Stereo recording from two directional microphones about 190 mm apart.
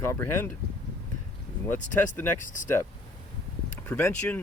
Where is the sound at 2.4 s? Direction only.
45° left (ahead or behind).